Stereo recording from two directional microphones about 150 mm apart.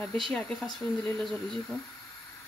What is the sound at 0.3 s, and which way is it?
Speech, 5° left (ahead or behind).